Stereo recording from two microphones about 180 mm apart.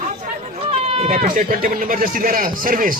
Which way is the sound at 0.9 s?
40° right (ahead or behind).